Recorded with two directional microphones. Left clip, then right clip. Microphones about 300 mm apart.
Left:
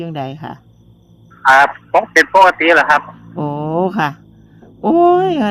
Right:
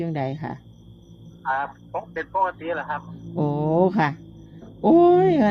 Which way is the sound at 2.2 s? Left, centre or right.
Left.